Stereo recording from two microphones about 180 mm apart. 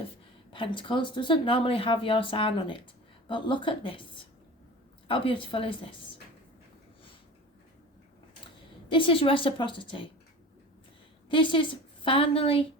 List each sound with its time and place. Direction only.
0.5 s speech: 25° left (ahead or behind)
5.0 s speech: 30° left (ahead or behind)
8.9 s speech: 30° left (ahead or behind)
11.3 s a woman's voice: 30° left (ahead or behind)